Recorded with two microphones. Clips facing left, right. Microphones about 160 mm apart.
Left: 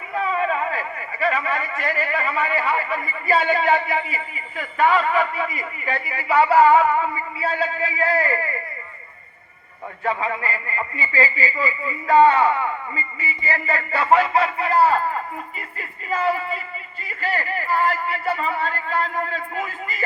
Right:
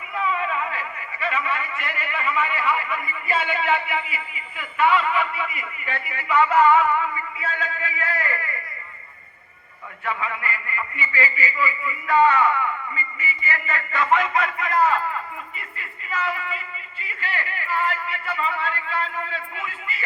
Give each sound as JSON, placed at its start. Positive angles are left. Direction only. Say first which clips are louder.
{"t": 0.1, "sound": "speech", "louder": "left 3 dB", "side_deg": 40}
{"t": 10.0, "sound": "speech", "louder": "left 4 dB", "side_deg": 35}